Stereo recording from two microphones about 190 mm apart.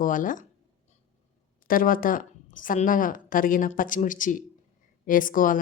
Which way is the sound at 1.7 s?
45° left (ahead or behind).